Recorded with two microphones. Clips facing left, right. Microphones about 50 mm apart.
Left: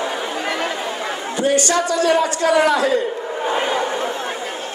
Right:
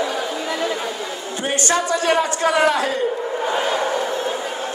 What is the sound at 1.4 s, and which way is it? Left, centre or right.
A man's voice, right.